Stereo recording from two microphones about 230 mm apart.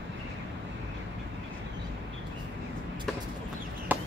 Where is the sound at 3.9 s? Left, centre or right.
Centre.